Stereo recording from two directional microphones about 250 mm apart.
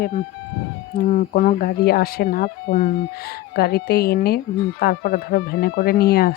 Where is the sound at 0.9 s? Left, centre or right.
Left.